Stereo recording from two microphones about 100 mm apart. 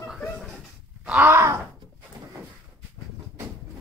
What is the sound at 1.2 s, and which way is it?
Groan, 25° right (ahead or behind).